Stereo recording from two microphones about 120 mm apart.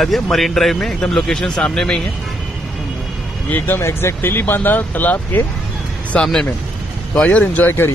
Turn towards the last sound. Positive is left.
turn(degrees=15)  # may be behind; listen again after turning